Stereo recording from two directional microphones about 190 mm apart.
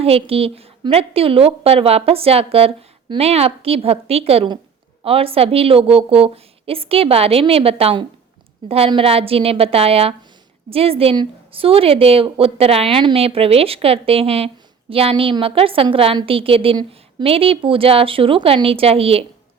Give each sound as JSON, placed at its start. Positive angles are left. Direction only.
{"t": 0.0, "sound": "a woman's voice", "side_deg": -30}